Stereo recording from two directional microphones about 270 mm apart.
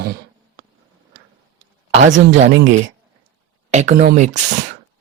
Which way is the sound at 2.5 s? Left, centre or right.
Right.